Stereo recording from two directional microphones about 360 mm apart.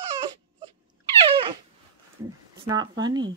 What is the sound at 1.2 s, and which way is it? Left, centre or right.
Dog, centre.